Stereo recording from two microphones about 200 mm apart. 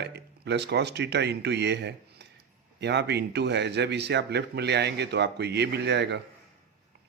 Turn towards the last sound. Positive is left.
turn(degrees=-60)  # may be behind; listen again after turning